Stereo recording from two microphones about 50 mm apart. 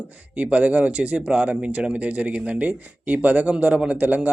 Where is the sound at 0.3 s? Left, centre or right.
Right.